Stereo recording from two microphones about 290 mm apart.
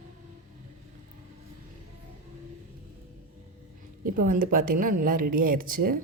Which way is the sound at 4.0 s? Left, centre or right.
Right.